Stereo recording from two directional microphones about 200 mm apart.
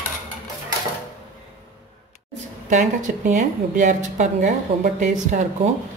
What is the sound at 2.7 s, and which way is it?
A woman's voice, 40° right (ahead or behind).